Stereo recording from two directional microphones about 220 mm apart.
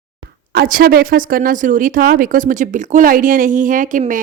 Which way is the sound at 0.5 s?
40° right (ahead or behind).